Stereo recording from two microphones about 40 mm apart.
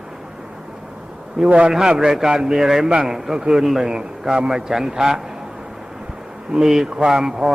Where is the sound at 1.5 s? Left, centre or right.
Right.